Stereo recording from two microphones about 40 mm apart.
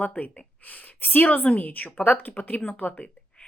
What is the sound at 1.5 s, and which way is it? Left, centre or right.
A woman's voice, left.